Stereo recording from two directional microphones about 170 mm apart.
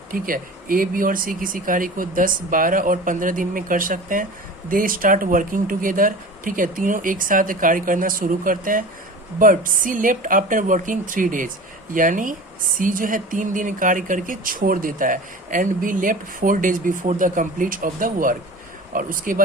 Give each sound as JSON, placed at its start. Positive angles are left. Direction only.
{"t": 0.1, "sound": "speech", "side_deg": -55}